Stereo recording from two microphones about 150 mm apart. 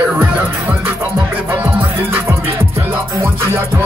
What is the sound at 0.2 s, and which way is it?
Music, 10° right (ahead or behind).